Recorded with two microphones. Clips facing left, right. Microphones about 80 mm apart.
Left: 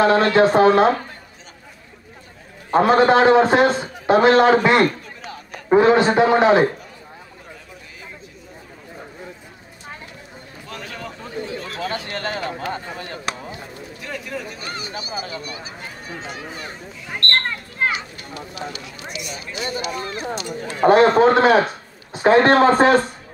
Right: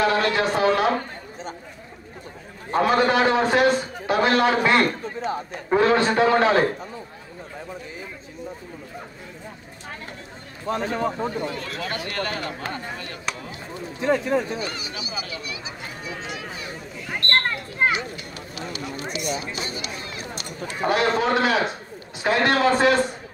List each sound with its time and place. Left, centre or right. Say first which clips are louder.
0.0 s speech: left 6 dB; left
2.7 s a man's voice: left 5 dB; left
10.7 s a man's voice: right 10 dB; right
11.8 s a man's voice: left 2 dB; left
13.9 s speech: right 10 dB; right
14.6 s speech: even; left
17.1 s a sound: even; centre
18.1 s a man's voice: left 2 dB; left
18.7 s a man's voice: right 3 dB; right
19.8 s speech: left 7 dB; left